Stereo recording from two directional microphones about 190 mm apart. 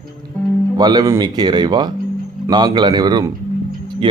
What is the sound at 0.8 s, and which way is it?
Speech, 20° right (ahead or behind).